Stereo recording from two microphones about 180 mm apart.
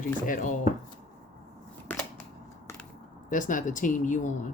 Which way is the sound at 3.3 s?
45° left (ahead or behind).